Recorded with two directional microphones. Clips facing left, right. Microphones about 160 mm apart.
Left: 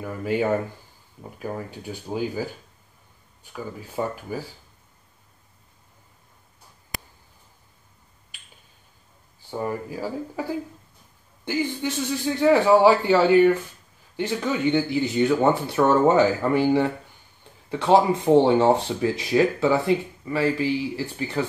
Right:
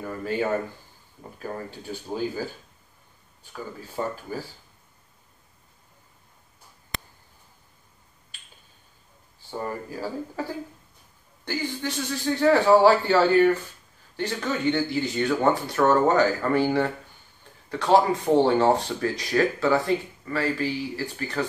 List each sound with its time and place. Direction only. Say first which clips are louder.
0.0 s speech: left 3 dB; 10° left (ahead or behind)
3.5 s speech: left 2 dB; 10° left (ahead or behind)
9.5 s speech: left 3 dB; 10° left (ahead or behind)
11.4 s speech: left 4 dB; 15° left (ahead or behind)
17.6 s speech: left 2 dB; 20° left (ahead or behind)